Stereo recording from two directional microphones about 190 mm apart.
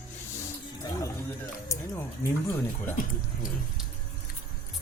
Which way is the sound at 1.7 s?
15° left (ahead or behind).